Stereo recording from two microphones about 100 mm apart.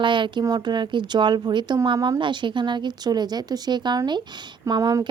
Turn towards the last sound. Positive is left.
turn(degrees=-45)  # may be behind; listen again after turning